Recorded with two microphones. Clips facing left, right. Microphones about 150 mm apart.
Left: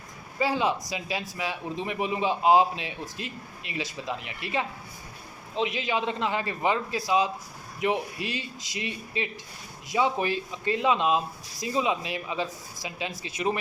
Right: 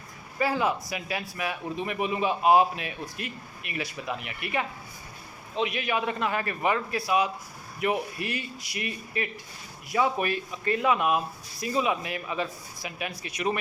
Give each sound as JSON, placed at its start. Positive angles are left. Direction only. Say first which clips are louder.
{"t": 0.3, "sound": "a man's voice", "louder": "even", "side_deg": 20}